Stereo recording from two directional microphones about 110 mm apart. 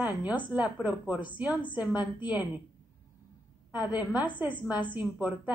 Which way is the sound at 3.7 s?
15° right (ahead or behind).